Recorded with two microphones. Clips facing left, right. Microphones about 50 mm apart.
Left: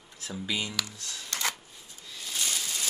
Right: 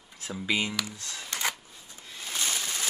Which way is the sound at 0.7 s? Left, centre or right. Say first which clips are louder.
Right 2 dB; centre.